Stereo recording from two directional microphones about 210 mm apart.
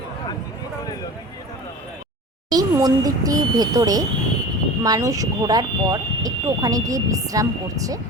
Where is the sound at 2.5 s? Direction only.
15° right (ahead or behind).